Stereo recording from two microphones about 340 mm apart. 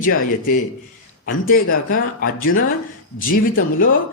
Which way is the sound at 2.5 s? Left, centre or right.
Left.